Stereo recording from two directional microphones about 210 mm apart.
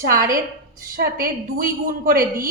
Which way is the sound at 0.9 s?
45° right (ahead or behind).